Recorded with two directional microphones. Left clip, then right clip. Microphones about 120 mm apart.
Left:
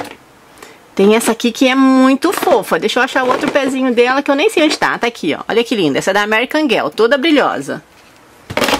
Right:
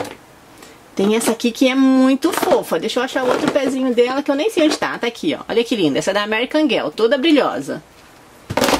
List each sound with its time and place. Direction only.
0.9 s speech: 35° left (ahead or behind)